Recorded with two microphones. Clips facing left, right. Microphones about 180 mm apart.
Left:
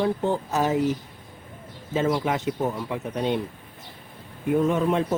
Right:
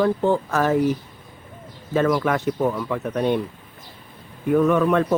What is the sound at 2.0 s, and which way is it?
Speech, 55° right (ahead or behind).